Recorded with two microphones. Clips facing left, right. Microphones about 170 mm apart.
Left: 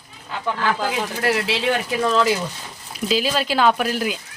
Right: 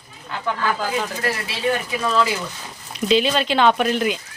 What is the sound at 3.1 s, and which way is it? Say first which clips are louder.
Speech: right 3 dB; 5° left (ahead or behind).